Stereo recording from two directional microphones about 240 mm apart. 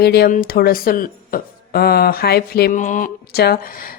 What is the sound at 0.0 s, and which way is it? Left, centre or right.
A woman's voice, left.